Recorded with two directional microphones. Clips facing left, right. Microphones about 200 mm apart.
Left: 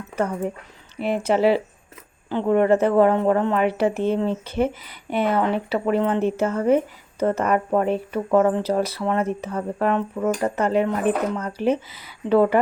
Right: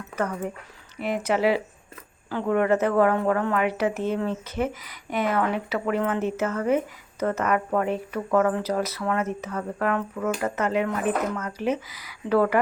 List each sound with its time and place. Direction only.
0.9 s speech: 30° left (ahead or behind)